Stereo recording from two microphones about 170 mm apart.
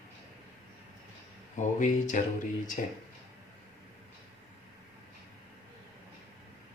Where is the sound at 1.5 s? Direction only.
50° left (ahead or behind).